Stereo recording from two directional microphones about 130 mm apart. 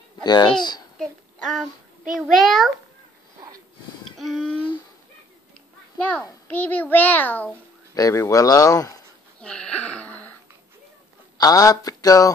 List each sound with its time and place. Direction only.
0.2 s speech: 35° left (ahead or behind)
0.9 s child singing: 5° left (ahead or behind)
2.1 s a child's voice: centre (ahead or behind)
4.2 s a child's voice: centre (ahead or behind)
5.9 s a child's voice: 10° left (ahead or behind)
7.9 s speech: 25° left (ahead or behind)
9.4 s a sound: 5° left (ahead or behind)
11.3 s speech: 30° left (ahead or behind)